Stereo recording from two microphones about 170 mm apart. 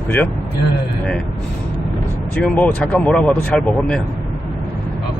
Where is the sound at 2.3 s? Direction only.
10° left (ahead or behind).